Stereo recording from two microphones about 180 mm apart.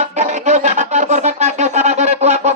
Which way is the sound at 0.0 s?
40° right (ahead or behind).